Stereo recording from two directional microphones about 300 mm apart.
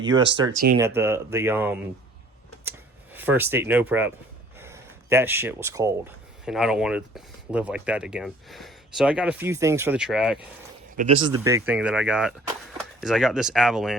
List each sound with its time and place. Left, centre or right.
0.1 s speech: right
0.8 s speech: centre
2.6 s a sound: centre
4.6 s speech: centre
11.1 s speech: centre